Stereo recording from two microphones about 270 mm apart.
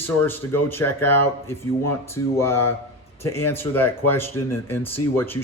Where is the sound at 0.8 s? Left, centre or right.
Left.